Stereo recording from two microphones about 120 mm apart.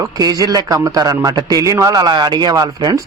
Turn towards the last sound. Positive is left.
turn(degrees=-30)  # may be behind; listen again after turning